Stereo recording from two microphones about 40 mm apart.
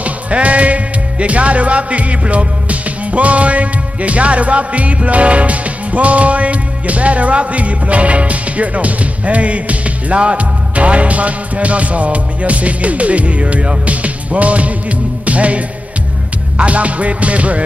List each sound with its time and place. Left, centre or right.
0.0 s music: right